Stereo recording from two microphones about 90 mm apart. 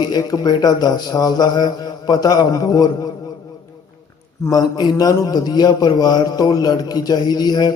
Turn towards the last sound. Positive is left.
turn(degrees=50)  # may be behind; listen again after turning